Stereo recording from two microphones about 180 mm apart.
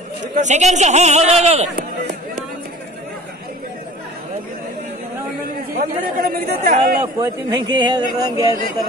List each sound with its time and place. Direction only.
0.3 s speech: 40° right (ahead or behind)
5.8 s speech: 50° right (ahead or behind)
7.2 s a man's voice: 25° right (ahead or behind)